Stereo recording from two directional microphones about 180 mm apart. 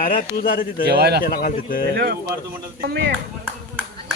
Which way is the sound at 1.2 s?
50° left (ahead or behind).